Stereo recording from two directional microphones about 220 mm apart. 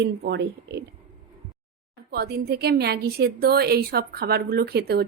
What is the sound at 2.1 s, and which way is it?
A woman's voice, 45° right (ahead or behind).